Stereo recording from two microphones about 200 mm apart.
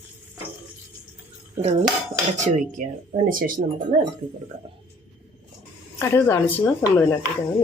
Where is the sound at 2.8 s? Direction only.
40° right (ahead or behind).